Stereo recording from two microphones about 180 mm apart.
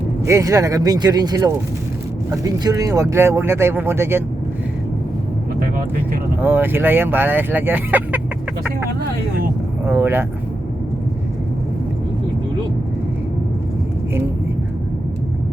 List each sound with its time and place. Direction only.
0.3 s speech: 20° right (ahead or behind)
6.4 s speech: 10° right (ahead or behind)
9.8 s speech: 10° right (ahead or behind)